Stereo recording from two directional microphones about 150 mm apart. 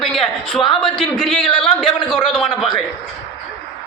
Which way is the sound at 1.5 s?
5° left (ahead or behind).